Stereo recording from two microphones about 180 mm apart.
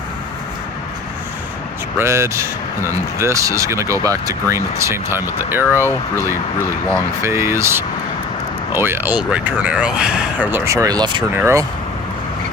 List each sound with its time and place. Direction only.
2.0 s speech: 15° right (ahead or behind)
7.2 s speech: 15° right (ahead or behind)